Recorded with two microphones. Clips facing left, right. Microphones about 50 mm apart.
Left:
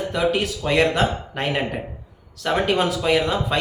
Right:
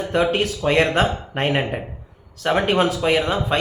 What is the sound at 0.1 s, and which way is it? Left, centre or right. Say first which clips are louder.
A man's voice: right 3 dB; right.